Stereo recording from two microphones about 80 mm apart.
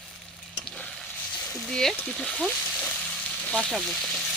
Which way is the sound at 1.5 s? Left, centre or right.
Centre.